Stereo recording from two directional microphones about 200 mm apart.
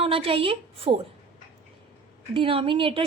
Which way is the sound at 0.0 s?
30° right (ahead or behind).